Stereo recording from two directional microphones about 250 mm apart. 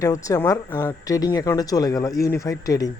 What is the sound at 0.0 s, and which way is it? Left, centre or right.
Speech, centre.